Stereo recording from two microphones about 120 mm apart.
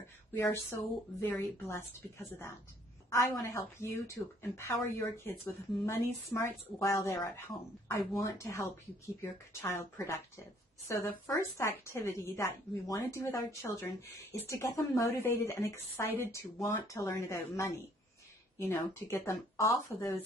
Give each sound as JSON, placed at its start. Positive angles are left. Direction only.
{"t": 0.5, "sound": "a woman's voice", "side_deg": 20}